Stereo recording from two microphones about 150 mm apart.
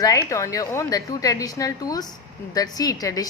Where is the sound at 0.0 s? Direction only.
20° left (ahead or behind).